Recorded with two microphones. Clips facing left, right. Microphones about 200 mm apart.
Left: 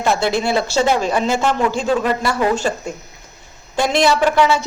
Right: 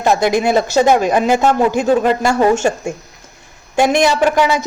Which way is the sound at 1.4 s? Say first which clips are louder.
Right 5 dB; 45° right (ahead or behind).